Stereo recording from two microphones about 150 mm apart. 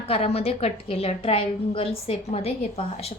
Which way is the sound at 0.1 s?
40° left (ahead or behind).